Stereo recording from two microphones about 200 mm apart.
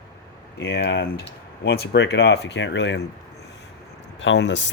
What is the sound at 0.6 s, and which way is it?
Speech, 55° left (ahead or behind).